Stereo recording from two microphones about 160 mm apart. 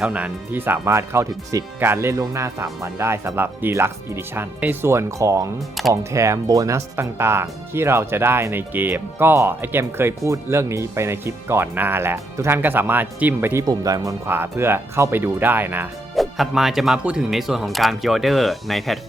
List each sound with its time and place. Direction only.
0.0 s speech: 10° right (ahead or behind)
16.1 s speech: centre (ahead or behind)